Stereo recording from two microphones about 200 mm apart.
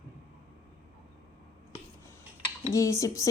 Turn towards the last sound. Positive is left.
turn(degrees=15)  # may be behind; listen again after turning